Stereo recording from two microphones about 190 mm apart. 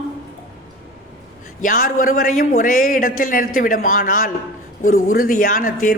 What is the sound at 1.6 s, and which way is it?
A woman's voice, 45° left (ahead or behind).